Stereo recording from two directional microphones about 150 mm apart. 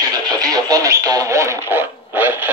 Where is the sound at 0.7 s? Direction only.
25° right (ahead or behind).